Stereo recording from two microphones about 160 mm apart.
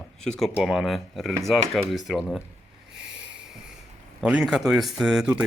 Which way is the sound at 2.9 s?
5° right (ahead or behind).